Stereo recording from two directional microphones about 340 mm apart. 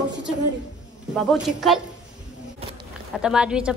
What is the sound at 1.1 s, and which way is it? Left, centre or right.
Speech, centre.